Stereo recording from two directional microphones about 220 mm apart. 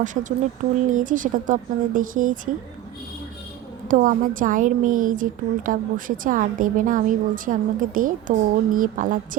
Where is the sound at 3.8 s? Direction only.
40° right (ahead or behind).